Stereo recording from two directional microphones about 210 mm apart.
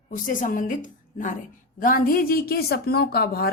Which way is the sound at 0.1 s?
40° left (ahead or behind).